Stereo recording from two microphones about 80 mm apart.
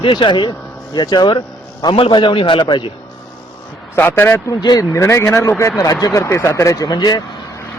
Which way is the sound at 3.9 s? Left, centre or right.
Left.